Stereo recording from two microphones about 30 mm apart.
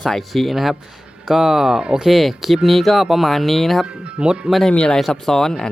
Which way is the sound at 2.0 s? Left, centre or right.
Centre.